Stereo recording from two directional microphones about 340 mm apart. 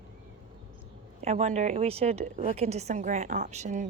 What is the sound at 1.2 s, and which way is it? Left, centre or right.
A woman's voice, centre.